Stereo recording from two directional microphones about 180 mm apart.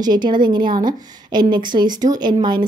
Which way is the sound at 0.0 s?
25° right (ahead or behind).